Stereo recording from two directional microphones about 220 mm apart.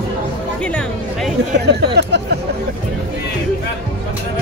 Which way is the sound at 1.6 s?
50° right (ahead or behind).